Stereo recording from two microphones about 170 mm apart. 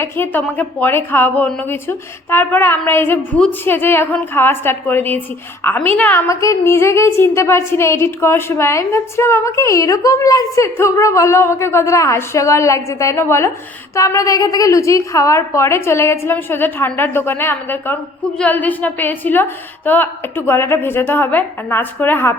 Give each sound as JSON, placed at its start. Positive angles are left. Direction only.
{"t": 0.0, "sound": "a woman's voice", "side_deg": 10}